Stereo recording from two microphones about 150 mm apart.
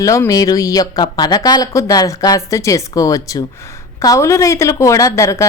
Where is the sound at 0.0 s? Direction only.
20° left (ahead or behind).